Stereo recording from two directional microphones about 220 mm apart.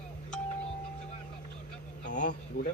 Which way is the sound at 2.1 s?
35° left (ahead or behind).